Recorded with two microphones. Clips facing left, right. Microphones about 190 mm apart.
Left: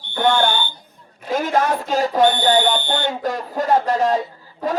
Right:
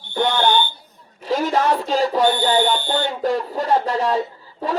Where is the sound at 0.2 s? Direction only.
50° left (ahead or behind).